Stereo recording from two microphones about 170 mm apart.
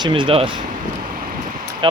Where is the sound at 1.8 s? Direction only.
30° right (ahead or behind).